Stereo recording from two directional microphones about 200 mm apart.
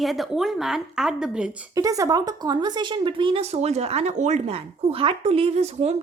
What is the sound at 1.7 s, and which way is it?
Speech, 15° right (ahead or behind).